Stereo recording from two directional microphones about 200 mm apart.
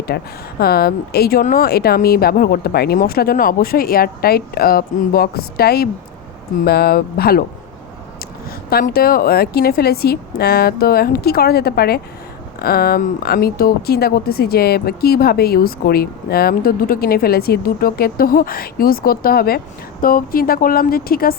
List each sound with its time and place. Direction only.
0.1 s speech: 50° left (ahead or behind)
8.7 s speech: 50° left (ahead or behind)